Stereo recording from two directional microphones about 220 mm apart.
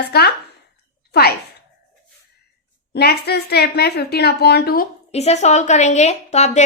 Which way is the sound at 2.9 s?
45° left (ahead or behind).